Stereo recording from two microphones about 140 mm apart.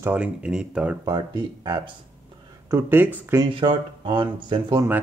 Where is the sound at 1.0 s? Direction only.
35° right (ahead or behind).